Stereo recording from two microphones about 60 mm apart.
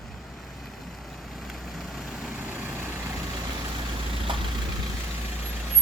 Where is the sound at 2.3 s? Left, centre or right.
Right.